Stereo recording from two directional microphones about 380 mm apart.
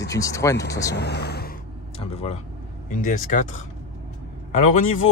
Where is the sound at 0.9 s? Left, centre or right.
Left.